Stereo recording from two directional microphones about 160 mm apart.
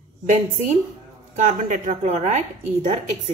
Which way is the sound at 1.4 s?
50° right (ahead or behind).